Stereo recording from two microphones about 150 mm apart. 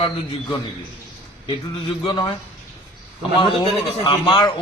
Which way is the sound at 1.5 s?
30° left (ahead or behind).